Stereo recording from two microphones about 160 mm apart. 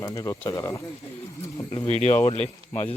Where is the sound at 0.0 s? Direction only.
20° left (ahead or behind).